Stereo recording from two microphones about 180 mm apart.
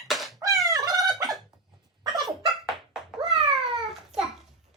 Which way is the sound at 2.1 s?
Centre (ahead or behind).